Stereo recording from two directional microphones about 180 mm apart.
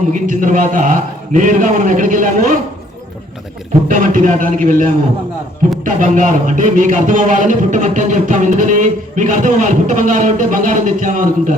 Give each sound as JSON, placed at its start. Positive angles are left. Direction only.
{"t": 0.1, "sound": "a man's voice", "side_deg": -45}
{"t": 3.8, "sound": "a man's voice", "side_deg": -45}